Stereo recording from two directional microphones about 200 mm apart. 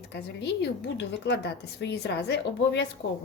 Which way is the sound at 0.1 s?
55° left (ahead or behind).